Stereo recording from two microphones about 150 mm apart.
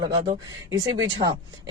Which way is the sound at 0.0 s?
30° right (ahead or behind).